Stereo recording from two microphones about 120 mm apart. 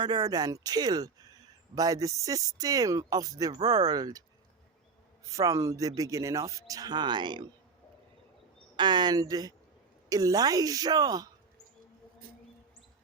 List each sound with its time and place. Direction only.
0.0 s speech: 35° right (ahead or behind)
5.3 s speech: 30° right (ahead or behind)
8.7 s speech: 40° right (ahead or behind)